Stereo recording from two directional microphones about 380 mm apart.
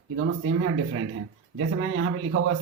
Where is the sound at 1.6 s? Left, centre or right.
Right.